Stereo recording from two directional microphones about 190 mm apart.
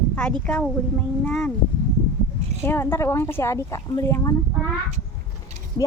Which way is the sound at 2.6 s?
10° left (ahead or behind).